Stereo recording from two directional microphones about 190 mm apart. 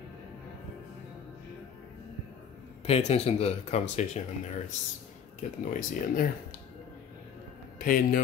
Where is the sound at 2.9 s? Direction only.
35° left (ahead or behind).